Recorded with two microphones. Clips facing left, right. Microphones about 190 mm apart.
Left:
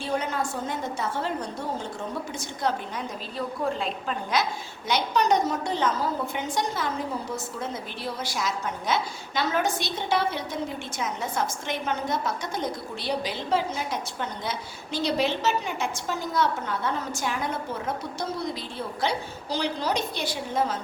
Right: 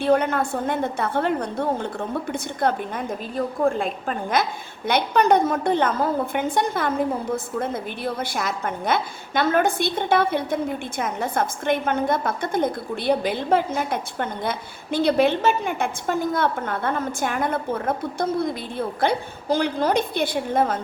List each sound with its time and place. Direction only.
0.0 s a woman's voice: 60° right (ahead or behind)